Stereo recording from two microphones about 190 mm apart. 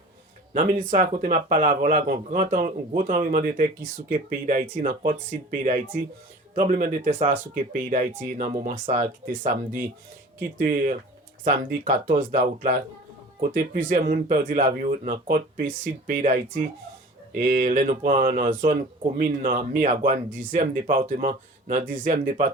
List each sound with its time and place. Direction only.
0.5 s speech: 45° right (ahead or behind)
4.7 s speech: 45° right (ahead or behind)